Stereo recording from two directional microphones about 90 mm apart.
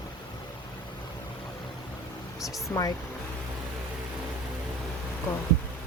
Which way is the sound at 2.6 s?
45° left (ahead or behind).